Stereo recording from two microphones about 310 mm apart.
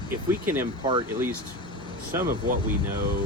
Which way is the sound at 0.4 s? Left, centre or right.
Centre.